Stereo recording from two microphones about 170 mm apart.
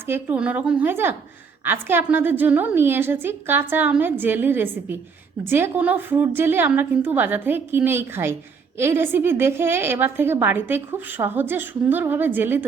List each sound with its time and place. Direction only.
0.1 s a woman's voice: 10° right (ahead or behind)